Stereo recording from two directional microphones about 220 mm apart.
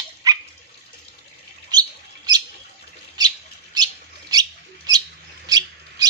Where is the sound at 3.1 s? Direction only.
20° right (ahead or behind).